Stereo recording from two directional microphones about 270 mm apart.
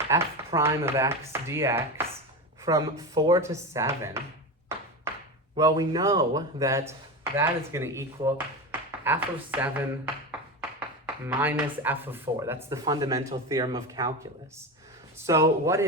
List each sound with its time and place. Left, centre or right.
0.1 s speech: centre
5.5 s speech: centre
15.3 s speech: centre